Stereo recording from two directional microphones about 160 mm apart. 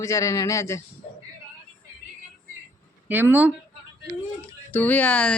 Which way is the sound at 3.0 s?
10° right (ahead or behind).